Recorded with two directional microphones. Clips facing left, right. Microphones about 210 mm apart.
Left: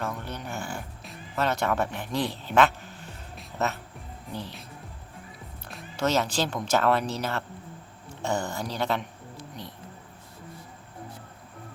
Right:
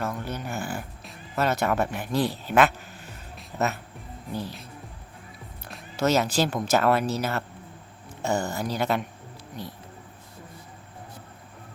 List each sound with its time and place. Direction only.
0.0 s speech: 5° right (ahead or behind)
3.3 s music: 5° right (ahead or behind)
4.3 s speech: 10° right (ahead or behind)
5.6 s music: 5° right (ahead or behind)
6.7 s speech: 10° right (ahead or behind)